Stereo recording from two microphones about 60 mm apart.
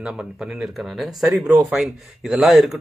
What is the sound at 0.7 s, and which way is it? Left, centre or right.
Speech, centre.